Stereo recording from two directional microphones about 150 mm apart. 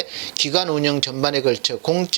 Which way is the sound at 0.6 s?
20° right (ahead or behind).